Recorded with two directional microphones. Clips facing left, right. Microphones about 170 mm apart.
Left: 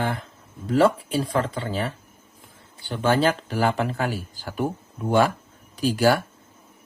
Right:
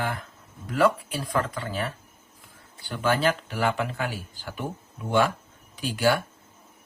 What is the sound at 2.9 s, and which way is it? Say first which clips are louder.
Speech: left 3 dB; 25° left (ahead or behind).